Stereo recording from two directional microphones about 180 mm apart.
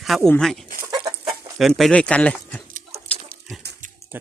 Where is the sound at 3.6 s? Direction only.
65° right (ahead or behind).